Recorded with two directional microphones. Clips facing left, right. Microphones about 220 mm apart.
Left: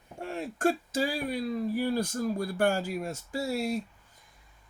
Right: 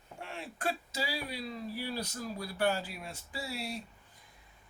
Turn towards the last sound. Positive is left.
turn(degrees=45)  # may be behind; listen again after turning